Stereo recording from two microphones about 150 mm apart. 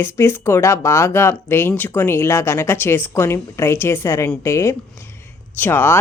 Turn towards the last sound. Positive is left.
turn(degrees=15)  # may be behind; listen again after turning